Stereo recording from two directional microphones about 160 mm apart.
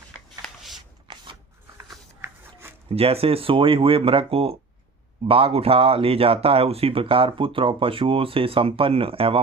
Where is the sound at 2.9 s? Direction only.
35° right (ahead or behind).